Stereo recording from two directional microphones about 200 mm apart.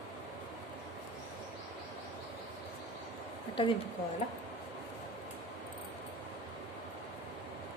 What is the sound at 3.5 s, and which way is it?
Speech, 25° left (ahead or behind).